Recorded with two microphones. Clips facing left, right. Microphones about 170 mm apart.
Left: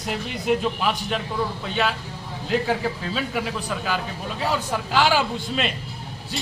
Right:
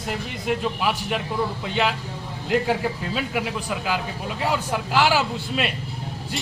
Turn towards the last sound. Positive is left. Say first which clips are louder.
# even
turn(degrees=-5)  # may be behind; listen again after turning